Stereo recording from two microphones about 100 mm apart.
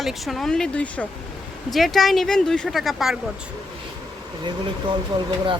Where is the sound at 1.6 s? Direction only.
Centre (ahead or behind).